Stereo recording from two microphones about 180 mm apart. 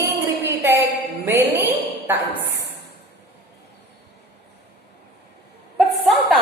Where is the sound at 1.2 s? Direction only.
10° right (ahead or behind).